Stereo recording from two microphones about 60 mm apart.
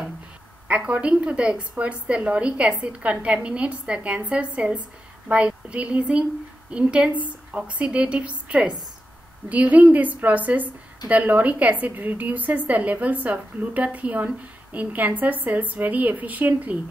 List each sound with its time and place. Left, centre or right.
0.7 s a woman's voice: right